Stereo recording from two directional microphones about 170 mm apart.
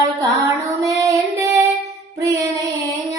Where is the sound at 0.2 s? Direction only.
20° right (ahead or behind).